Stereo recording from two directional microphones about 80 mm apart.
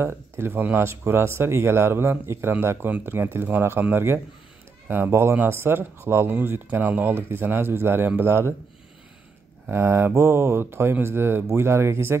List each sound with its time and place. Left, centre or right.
0.0 s speech: right
9.7 s speech: right